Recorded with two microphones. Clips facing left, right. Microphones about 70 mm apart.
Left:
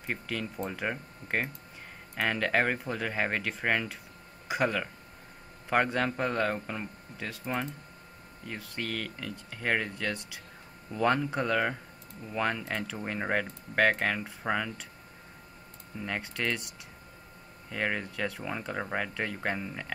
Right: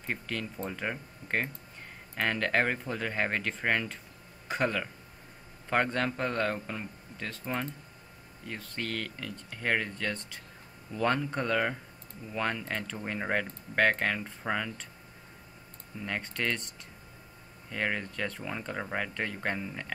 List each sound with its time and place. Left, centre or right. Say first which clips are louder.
0.0 s a man's voice: left 1 dB; centre
16.0 s a man's voice: even; centre